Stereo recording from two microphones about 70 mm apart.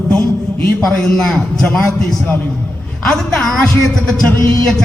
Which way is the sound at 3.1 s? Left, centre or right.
Centre.